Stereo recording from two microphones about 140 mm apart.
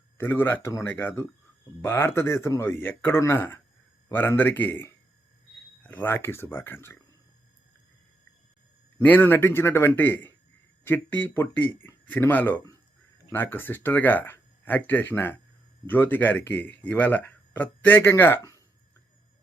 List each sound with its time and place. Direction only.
0.2 s speech: 15° left (ahead or behind)
9.0 s speech: 15° left (ahead or behind)